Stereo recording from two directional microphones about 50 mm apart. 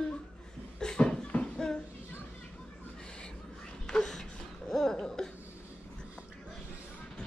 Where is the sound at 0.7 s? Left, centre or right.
Centre.